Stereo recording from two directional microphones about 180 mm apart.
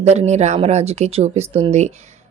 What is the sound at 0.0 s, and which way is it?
Speech, 35° right (ahead or behind).